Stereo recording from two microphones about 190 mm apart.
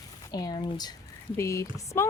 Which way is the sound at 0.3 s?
20° left (ahead or behind).